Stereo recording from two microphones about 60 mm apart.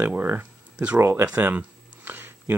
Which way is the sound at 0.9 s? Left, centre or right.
Right.